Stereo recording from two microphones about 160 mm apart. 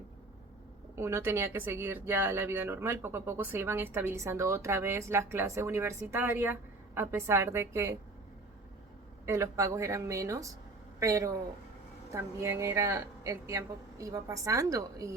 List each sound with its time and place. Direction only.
0.9 s speech: 15° right (ahead or behind)
9.2 s a woman's voice: 15° right (ahead or behind)